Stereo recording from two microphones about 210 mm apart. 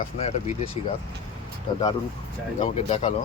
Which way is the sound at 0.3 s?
30° left (ahead or behind).